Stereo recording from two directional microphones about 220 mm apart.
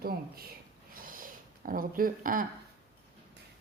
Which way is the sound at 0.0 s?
45° right (ahead or behind).